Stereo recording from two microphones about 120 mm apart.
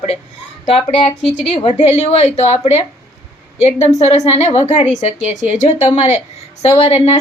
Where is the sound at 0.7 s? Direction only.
50° left (ahead or behind).